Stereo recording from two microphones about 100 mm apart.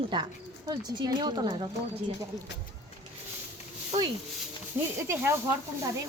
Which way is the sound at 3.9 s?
70° right (ahead or behind).